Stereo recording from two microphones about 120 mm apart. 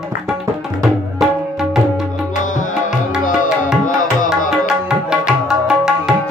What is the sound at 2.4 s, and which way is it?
Music, 90° left.